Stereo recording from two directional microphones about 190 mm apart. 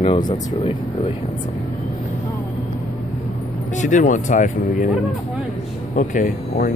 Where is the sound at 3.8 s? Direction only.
40° left (ahead or behind).